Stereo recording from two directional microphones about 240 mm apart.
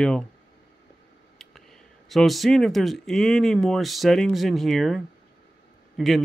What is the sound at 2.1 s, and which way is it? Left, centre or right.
Speech, centre.